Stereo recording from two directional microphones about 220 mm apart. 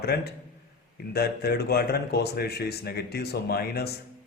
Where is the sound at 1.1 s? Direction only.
45° left (ahead or behind).